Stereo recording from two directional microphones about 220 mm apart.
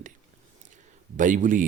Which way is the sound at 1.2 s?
35° right (ahead or behind).